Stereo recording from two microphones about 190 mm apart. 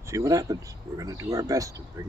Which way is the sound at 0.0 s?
15° right (ahead or behind).